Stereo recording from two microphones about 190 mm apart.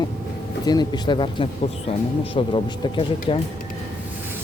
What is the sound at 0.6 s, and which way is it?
Speech, 20° left (ahead or behind).